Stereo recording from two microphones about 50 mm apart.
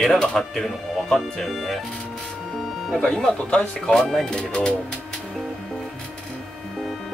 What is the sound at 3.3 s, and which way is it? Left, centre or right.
Speech, left.